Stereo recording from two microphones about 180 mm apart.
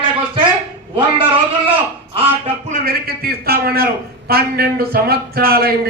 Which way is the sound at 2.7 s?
55° right (ahead or behind).